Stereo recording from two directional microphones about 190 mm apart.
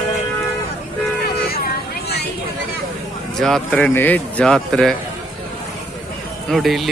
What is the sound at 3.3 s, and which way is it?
A man's voice, centre (ahead or behind).